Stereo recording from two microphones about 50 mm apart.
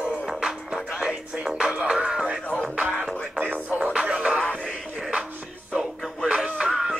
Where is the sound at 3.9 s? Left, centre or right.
Right.